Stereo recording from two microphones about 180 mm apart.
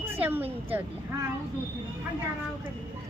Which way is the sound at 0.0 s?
10° right (ahead or behind).